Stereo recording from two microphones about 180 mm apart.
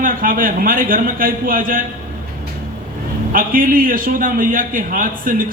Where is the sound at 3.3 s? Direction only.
50° right (ahead or behind).